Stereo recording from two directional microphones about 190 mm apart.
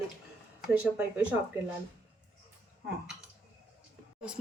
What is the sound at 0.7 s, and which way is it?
Speech, 5° right (ahead or behind).